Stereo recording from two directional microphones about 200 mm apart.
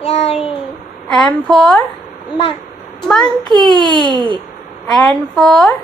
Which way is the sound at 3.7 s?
25° right (ahead or behind).